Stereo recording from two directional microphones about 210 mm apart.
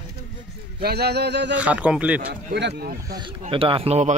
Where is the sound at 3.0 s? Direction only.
20° right (ahead or behind).